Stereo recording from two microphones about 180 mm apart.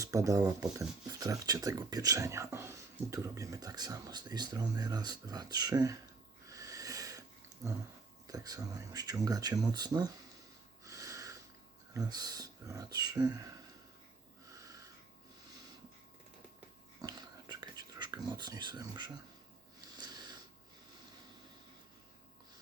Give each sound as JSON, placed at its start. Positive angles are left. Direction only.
{"t": 0.0, "sound": "speech", "side_deg": -15}
{"t": 6.5, "sound": "snort", "side_deg": -20}
{"t": 8.3, "sound": "speech", "side_deg": -20}
{"t": 10.8, "sound": "snort", "side_deg": -20}
{"t": 11.9, "sound": "speech", "side_deg": -20}
{"t": 14.5, "sound": "wheeze", "side_deg": -20}
{"t": 17.0, "sound": "whispering", "side_deg": -20}
{"t": 20.0, "sound": "a sound", "side_deg": -20}